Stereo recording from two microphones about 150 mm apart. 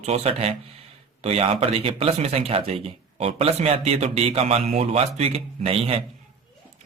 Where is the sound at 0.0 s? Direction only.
45° right (ahead or behind).